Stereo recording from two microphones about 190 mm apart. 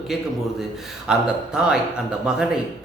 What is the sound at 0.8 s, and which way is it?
A man's voice, 5° right (ahead or behind).